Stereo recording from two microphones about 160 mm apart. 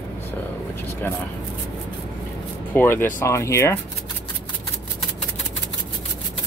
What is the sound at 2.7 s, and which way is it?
Speech, 15° left (ahead or behind).